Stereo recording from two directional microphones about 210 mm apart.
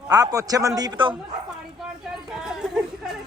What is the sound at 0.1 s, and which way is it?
A man's voice, 15° right (ahead or behind).